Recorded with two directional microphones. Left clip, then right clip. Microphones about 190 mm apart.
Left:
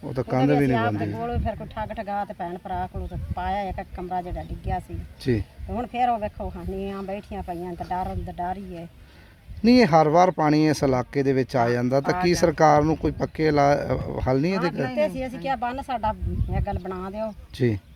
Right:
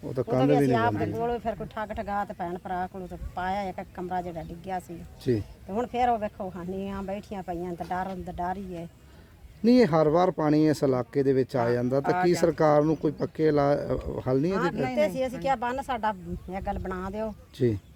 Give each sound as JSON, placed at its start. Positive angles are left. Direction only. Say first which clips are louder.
{"t": 0.1, "sound": "speech", "louder": "left 1 dB", "side_deg": 40}
{"t": 0.7, "sound": "speech", "louder": "left 1 dB", "side_deg": -10}
{"t": 5.2, "sound": "speech", "louder": "left 2 dB", "side_deg": 35}
{"t": 5.7, "sound": "speech", "louder": "left 2 dB", "side_deg": -10}
{"t": 9.6, "sound": "speech", "louder": "left 4 dB", "side_deg": 35}
{"t": 15.0, "sound": "speech", "louder": "even", "side_deg": -10}
{"t": 17.6, "sound": "speech", "louder": "left 2 dB", "side_deg": 35}